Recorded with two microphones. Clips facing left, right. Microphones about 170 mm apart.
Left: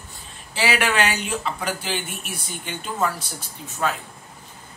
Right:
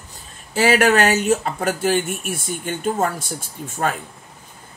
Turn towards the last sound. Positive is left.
turn(degrees=-45)  # may be behind; listen again after turning